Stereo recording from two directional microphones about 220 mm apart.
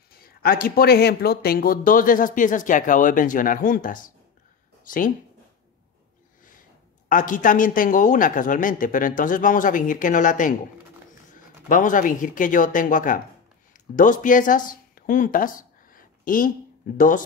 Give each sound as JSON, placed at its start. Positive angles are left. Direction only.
{"t": 0.1, "sound": "speech", "side_deg": 45}
{"t": 7.1, "sound": "speech", "side_deg": 35}